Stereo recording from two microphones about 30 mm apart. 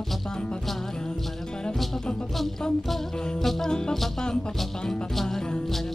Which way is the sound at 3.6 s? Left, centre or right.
Left.